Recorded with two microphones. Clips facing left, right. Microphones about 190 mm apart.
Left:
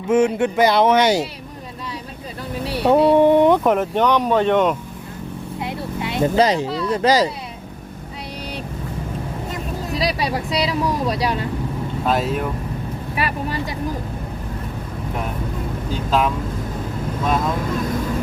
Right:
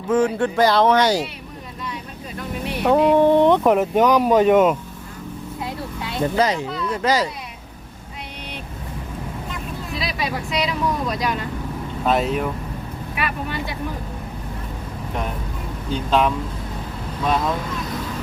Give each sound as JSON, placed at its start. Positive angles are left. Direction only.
{"t": 0.1, "sound": "speech", "side_deg": 20}
{"t": 2.6, "sound": "a sound", "side_deg": 35}
{"t": 3.2, "sound": "a sound", "side_deg": 15}
{"t": 3.6, "sound": "speech", "side_deg": 0}
{"t": 5.5, "sound": "a sound", "side_deg": 20}
{"t": 6.4, "sound": "speech", "side_deg": 35}
{"t": 9.5, "sound": "vehicle", "side_deg": 40}
{"t": 12.0, "sound": "speech", "side_deg": 0}
{"t": 13.1, "sound": "speech", "side_deg": 35}
{"t": 15.9, "sound": "speech", "side_deg": 5}